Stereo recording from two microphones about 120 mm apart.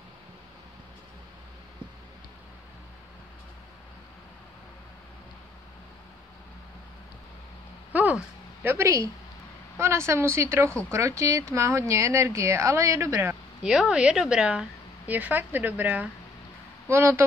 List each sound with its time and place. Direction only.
7.9 s a sound: 15° right (ahead or behind)
8.6 s speech: 25° right (ahead or behind)
13.7 s a woman's voice: 5° right (ahead or behind); by 17.2 s 20° right (ahead or behind)